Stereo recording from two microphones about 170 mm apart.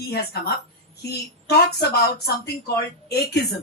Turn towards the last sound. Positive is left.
turn(degrees=70)  # may be behind; listen again after turning